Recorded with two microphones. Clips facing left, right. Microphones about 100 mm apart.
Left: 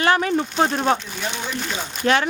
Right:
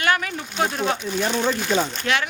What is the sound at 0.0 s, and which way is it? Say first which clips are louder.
Speech: left 4 dB; 30° left (ahead or behind).